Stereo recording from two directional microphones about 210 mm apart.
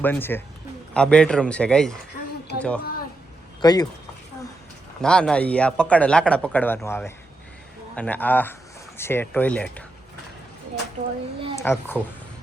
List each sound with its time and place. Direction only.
0.0 s speech: 10° left (ahead or behind)
3.6 s speech: 20° left (ahead or behind)
5.0 s speech: 5° left (ahead or behind)
11.0 s speech: 35° right (ahead or behind)
11.5 s a child's voice: 10° left (ahead or behind)